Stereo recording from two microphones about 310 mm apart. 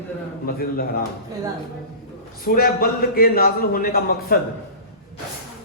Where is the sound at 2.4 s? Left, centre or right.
Left.